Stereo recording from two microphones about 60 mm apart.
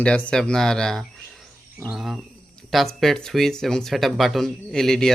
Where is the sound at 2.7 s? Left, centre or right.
Centre.